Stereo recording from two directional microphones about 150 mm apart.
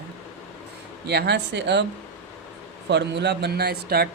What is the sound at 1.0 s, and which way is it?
Speech, 90° right.